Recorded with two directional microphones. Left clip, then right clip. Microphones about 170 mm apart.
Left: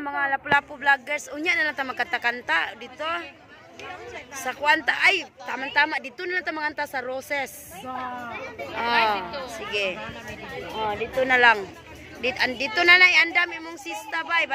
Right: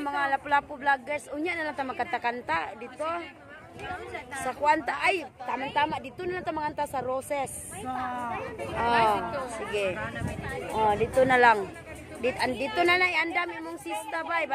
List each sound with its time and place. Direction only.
0.0 s speech: 15° right (ahead or behind)
4.5 s speech: 5° right (ahead or behind)
8.8 s speech: 5° right (ahead or behind)
9.3 s speech: 75° right (ahead or behind)
10.8 s speech: 25° right (ahead or behind); by 14.5 s 5° right (ahead or behind)